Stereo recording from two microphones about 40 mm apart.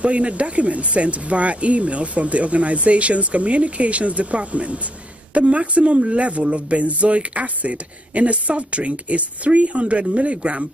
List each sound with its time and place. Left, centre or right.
0.0 s speech: right